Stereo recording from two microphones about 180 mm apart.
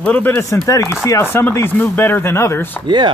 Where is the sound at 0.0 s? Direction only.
10° left (ahead or behind).